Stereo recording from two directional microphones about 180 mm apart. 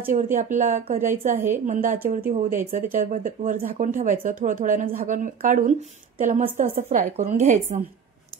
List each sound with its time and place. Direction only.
0.1 s a woman's voice: 45° right (ahead or behind)